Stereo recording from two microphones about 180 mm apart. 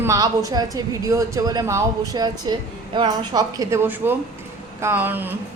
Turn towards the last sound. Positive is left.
turn(degrees=-10)  # may be behind; listen again after turning